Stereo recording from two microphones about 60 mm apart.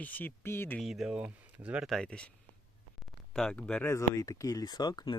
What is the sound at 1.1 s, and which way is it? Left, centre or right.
Speech, right.